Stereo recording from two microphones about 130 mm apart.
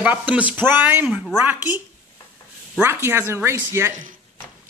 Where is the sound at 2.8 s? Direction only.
20° right (ahead or behind).